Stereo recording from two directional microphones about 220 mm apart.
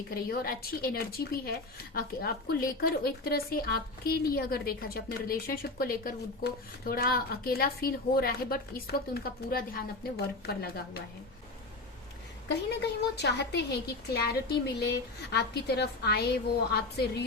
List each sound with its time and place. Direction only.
0.1 s a woman's voice: 40° left (ahead or behind)
12.5 s a woman's voice: 50° left (ahead or behind)